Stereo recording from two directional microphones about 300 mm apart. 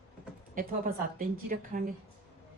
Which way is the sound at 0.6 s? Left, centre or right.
Right.